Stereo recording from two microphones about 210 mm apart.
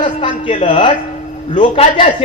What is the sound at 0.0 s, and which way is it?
Speech, 20° left (ahead or behind).